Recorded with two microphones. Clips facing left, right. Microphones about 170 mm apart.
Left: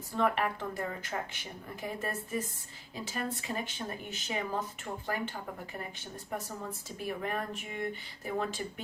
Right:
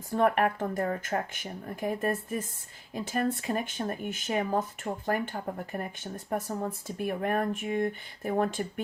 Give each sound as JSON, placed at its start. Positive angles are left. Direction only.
{"t": 0.2, "sound": "speech", "side_deg": -50}